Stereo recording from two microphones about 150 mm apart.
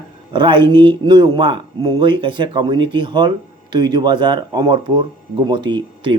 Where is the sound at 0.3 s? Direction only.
30° right (ahead or behind).